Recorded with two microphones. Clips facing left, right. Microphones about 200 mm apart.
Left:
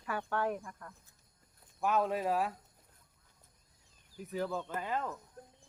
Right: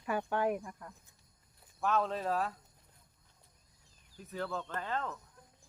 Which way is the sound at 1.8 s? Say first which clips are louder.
Left 1 dB; 10° left (ahead or behind).